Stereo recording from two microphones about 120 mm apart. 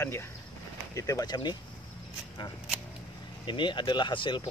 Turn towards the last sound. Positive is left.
turn(degrees=40)  # may be behind; listen again after turning